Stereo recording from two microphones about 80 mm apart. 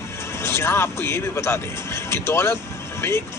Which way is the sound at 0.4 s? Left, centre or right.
Left.